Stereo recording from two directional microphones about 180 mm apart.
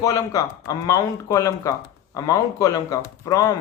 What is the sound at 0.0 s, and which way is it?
Speech, 20° left (ahead or behind).